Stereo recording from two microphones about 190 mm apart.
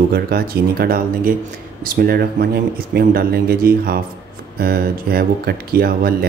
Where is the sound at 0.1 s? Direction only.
55° right (ahead or behind).